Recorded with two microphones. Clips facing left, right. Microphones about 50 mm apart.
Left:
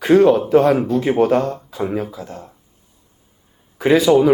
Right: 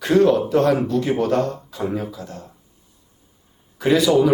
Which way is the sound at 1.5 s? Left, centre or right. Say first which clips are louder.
Left 3 dB; centre.